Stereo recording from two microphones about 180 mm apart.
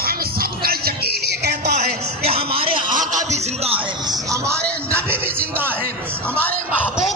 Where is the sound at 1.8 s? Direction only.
35° right (ahead or behind).